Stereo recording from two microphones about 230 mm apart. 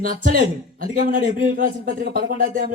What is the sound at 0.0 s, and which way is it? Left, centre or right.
A man's voice, right.